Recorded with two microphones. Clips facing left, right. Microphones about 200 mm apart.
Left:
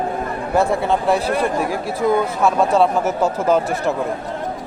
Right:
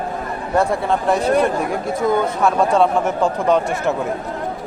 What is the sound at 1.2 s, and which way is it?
Speech, 30° left (ahead or behind).